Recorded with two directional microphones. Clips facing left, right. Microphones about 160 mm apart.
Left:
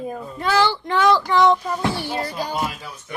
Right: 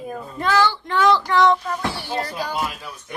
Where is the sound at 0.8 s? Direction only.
Centre (ahead or behind).